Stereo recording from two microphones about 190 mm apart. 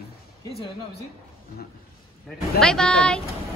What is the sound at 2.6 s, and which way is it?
Speech, 5° left (ahead or behind).